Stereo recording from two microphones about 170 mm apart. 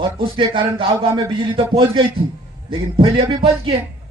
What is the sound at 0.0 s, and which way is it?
A man's voice, 30° right (ahead or behind).